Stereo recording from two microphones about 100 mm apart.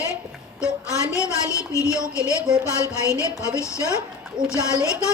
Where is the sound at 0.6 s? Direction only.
30° left (ahead or behind).